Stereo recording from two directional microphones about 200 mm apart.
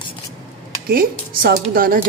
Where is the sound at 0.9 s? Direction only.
50° right (ahead or behind).